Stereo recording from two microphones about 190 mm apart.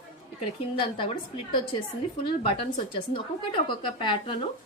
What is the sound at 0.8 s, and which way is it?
Speech, 25° left (ahead or behind).